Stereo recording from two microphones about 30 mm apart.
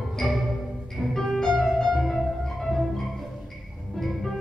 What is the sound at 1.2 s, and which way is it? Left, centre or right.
Music, centre.